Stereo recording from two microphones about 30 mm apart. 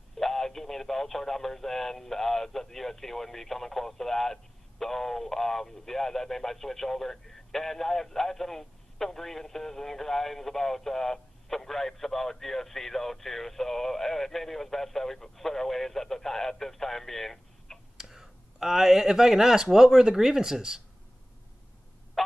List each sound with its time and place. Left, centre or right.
0.2 s speech: centre
17.9 s clicking: centre
19.0 s speech: centre